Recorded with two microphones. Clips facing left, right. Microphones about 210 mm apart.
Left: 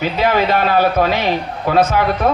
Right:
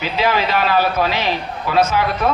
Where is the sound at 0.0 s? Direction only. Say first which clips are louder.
Left 3 dB; 50° left (ahead or behind).